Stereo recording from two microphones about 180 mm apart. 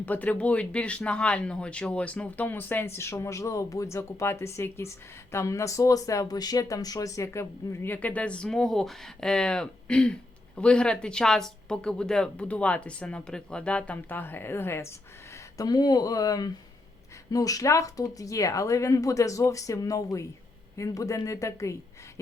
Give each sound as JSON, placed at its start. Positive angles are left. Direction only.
{"t": 0.0, "sound": "speech", "side_deg": 10}